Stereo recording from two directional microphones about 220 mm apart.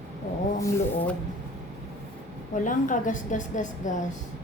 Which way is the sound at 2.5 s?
35° left (ahead or behind).